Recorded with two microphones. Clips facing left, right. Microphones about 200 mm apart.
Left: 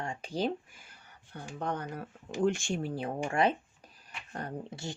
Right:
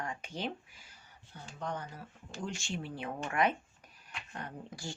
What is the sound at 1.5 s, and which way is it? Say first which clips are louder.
Speech: left 5 dB; 60° left (ahead or behind).